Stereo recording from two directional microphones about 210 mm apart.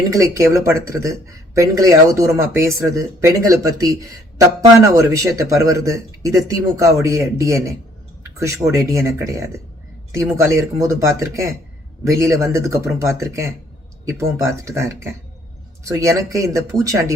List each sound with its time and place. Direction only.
0.1 s a man's voice: 15° right (ahead or behind)